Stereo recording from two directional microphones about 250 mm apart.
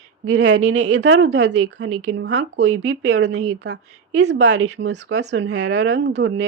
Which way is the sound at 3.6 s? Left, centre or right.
Right.